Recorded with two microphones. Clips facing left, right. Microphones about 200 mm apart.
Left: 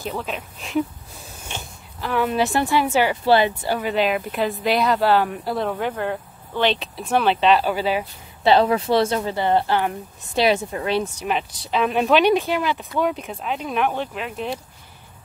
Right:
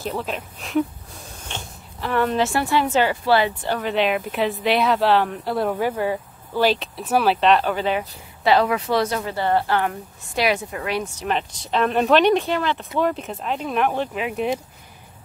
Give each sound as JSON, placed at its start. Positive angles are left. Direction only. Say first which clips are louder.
{"t": 0.0, "sound": "speech", "louder": "right 1 dB", "side_deg": 0}
{"t": 1.5, "sound": "a sound", "louder": "even", "side_deg": 0}
{"t": 2.3, "sound": "a woman's voice", "louder": "left 1 dB", "side_deg": 15}
{"t": 3.6, "sound": "speech", "louder": "even", "side_deg": 5}
{"t": 8.5, "sound": "speech", "louder": "left 2 dB", "side_deg": 30}
{"t": 11.1, "sound": "speech", "louder": "even", "side_deg": 5}